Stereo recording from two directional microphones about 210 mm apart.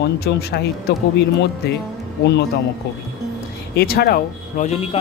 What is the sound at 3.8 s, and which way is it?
A man's voice, 50° left (ahead or behind).